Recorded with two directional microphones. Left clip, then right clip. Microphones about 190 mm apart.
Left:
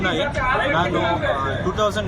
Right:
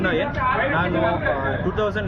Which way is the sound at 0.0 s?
5° right (ahead or behind).